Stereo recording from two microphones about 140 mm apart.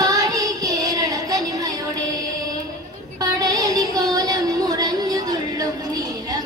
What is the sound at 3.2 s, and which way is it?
Music, 25° right (ahead or behind).